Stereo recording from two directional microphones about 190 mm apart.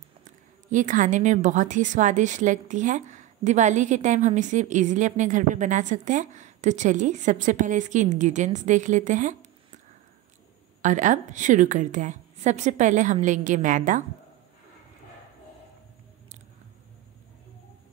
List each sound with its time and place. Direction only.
0.2 s a woman's voice: 40° right (ahead or behind)
10.8 s a woman's voice: 40° right (ahead or behind)